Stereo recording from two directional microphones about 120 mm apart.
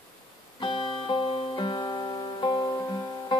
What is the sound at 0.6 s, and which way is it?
Music, 40° left (ahead or behind).